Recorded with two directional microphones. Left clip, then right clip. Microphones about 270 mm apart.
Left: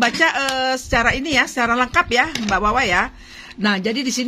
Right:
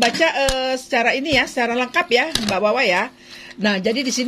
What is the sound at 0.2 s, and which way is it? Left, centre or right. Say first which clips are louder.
Speech: even; left.